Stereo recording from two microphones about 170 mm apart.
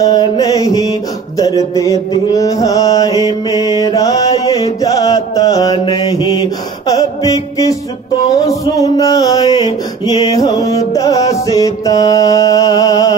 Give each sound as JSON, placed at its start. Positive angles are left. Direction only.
{"t": 0.0, "sound": "mantra", "side_deg": 20}